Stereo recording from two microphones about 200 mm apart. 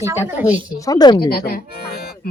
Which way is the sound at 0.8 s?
20° left (ahead or behind).